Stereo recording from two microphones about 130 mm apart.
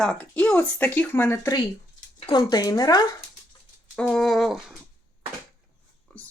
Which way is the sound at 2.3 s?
30° left (ahead or behind).